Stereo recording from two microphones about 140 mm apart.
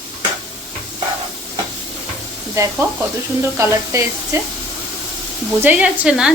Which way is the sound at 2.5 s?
20° right (ahead or behind).